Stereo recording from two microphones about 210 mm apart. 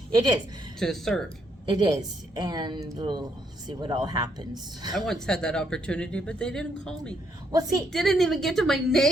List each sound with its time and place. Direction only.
0.1 s a woman's voice: 20° right (ahead or behind)
0.8 s speech: centre (ahead or behind)
1.6 s a woman's voice: 20° right (ahead or behind)
4.9 s speech: centre (ahead or behind)
7.5 s a woman's voice: 15° right (ahead or behind)
7.9 s speech: centre (ahead or behind)